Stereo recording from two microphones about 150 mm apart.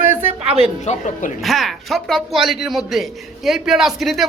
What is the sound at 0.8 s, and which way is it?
Speech, 55° left (ahead or behind).